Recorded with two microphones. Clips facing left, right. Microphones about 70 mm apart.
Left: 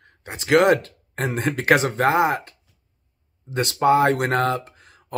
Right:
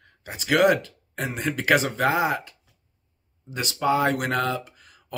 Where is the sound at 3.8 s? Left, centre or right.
Left.